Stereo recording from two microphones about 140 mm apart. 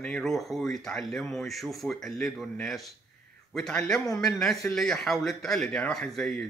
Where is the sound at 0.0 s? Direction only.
5° left (ahead or behind).